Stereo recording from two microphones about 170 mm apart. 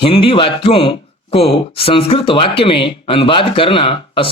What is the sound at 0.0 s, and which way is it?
Speech, 30° left (ahead or behind).